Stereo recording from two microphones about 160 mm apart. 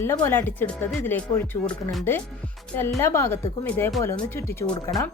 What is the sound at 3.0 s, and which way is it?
Speech, 15° left (ahead or behind).